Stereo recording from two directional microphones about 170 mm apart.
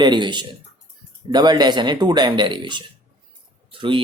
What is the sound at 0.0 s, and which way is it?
Speech, 25° right (ahead or behind).